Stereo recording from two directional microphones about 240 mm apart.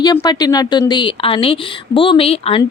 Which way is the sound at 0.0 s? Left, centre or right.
Centre.